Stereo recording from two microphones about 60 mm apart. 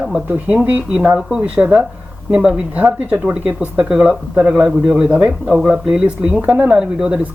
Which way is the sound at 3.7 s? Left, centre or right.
Centre.